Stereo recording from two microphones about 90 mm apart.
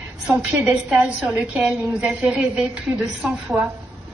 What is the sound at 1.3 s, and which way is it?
A woman's voice, 15° right (ahead or behind).